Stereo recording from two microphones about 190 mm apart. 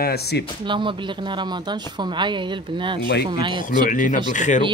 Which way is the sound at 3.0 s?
60° left (ahead or behind).